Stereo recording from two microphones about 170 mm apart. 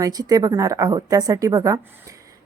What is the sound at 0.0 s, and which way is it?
A woman's voice, 20° right (ahead or behind).